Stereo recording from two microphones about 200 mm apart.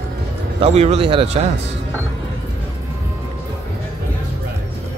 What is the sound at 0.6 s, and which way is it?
Speech, 30° right (ahead or behind).